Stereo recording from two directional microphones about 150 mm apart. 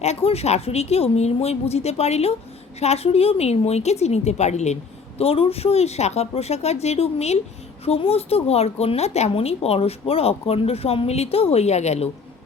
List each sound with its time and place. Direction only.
0.0 s a woman's voice: 45° left (ahead or behind)